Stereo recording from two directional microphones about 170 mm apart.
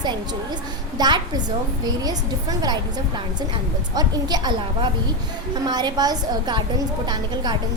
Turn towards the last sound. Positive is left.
turn(degrees=-25)  # may be behind; listen again after turning